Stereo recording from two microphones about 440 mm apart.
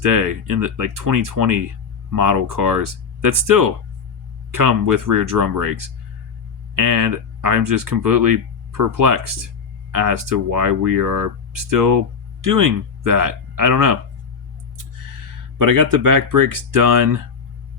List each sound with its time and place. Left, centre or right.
0.0 s speech: right
15.5 s speech: right